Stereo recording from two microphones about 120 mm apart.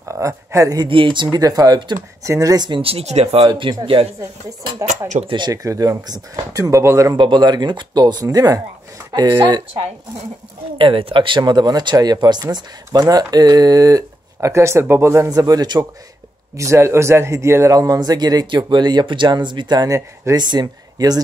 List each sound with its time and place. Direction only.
0.0 s a sound: 25° right (ahead or behind)
0.8 s speech: 45° right (ahead or behind)
2.8 s speech: 55° right (ahead or behind)
3.4 s speech: 45° right (ahead or behind)
4.2 s speech: 25° right (ahead or behind)
7.2 s speech: 40° right (ahead or behind)
10.8 s speech: 45° right (ahead or behind)
16.5 s speech: 25° right (ahead or behind)